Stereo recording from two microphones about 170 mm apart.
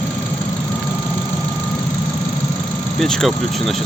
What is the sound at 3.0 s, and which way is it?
Speech, centre (ahead or behind).